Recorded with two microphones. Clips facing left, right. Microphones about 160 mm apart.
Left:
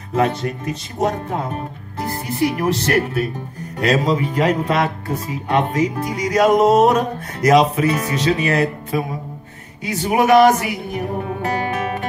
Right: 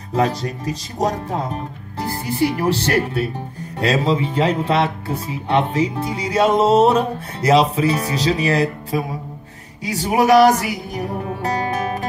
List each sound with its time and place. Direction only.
0.1 s speech: 35° right (ahead or behind)
9.8 s music: 35° right (ahead or behind)